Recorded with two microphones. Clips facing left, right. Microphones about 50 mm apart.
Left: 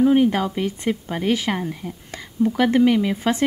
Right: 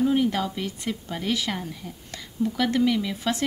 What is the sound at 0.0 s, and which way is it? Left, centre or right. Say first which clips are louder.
Speech: left 6 dB; left.